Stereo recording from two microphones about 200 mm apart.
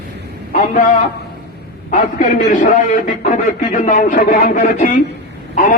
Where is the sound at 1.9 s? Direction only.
40° left (ahead or behind).